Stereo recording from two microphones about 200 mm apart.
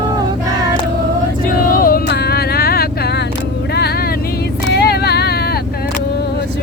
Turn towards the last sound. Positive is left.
turn(degrees=55)  # may be behind; listen again after turning